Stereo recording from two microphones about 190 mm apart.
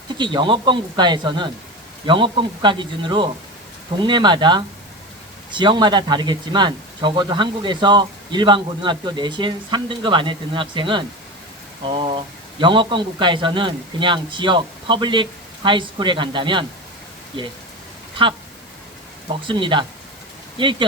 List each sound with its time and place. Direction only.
0.2 s speech: 25° right (ahead or behind)
19.3 s speech: 25° right (ahead or behind)